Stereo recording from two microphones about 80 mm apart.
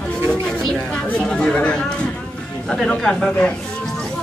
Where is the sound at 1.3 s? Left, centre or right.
Centre.